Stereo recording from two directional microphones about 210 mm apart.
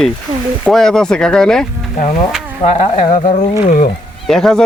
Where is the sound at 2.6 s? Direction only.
35° left (ahead or behind).